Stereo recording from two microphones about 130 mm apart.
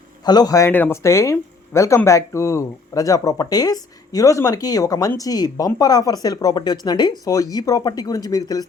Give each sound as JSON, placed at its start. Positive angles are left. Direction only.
{"t": 0.3, "sound": "speech", "side_deg": 30}
{"t": 0.7, "sound": "speech", "side_deg": 15}